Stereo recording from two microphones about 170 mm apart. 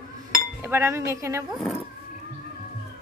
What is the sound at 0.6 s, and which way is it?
Speech, 15° right (ahead or behind).